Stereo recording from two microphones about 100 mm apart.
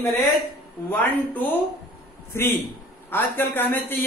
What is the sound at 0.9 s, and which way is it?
Speech, 20° left (ahead or behind).